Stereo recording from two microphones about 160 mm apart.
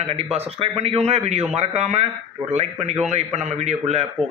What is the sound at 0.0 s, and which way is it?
A man's voice, 40° right (ahead or behind).